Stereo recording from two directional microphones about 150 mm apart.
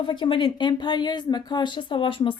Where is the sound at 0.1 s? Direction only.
30° left (ahead or behind).